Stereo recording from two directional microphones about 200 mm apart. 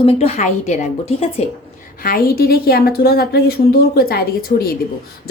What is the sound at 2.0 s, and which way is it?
A woman's voice, 50° left (ahead or behind).